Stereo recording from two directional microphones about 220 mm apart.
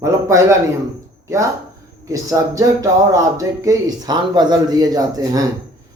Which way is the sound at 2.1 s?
15° right (ahead or behind).